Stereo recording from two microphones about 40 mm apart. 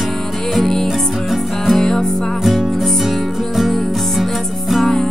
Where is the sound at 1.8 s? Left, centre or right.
Centre.